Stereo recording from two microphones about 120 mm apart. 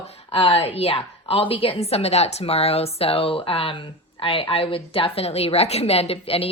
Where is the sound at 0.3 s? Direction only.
50° left (ahead or behind).